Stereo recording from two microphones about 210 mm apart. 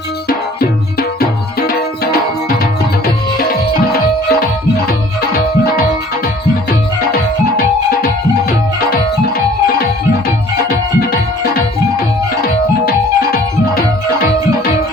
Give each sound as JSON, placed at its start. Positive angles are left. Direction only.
{"t": 0.3, "sound": "music", "side_deg": 45}
{"t": 10.7, "sound": "music", "side_deg": 45}
{"t": 12.8, "sound": "music", "side_deg": 45}